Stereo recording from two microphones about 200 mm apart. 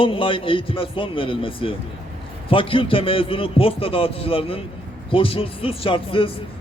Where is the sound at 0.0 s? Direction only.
25° left (ahead or behind).